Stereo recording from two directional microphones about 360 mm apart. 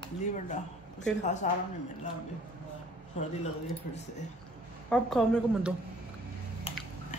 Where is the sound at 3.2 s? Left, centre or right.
Centre.